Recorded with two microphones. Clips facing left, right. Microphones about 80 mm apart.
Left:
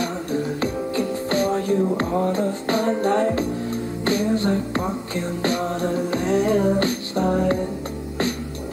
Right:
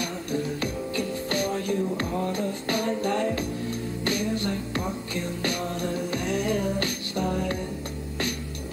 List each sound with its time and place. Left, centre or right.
0.0 s music: left